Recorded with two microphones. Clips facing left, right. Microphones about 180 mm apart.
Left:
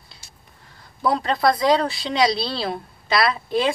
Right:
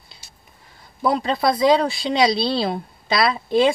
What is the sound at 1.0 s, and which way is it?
Speech, 20° right (ahead or behind).